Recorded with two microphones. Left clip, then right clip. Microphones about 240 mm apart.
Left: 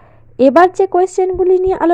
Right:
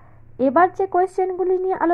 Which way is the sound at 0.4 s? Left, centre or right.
Left.